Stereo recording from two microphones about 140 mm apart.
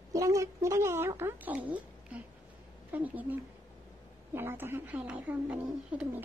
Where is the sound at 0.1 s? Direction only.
25° right (ahead or behind).